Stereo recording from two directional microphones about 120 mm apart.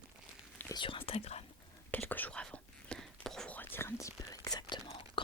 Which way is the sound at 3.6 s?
20° left (ahead or behind).